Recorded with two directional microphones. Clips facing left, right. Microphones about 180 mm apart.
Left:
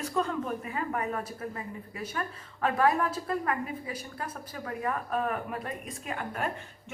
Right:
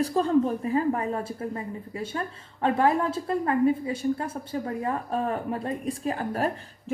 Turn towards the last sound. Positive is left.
turn(degrees=-35)  # may be behind; listen again after turning